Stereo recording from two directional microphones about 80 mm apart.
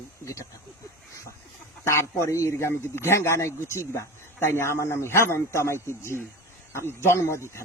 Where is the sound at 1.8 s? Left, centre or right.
Left.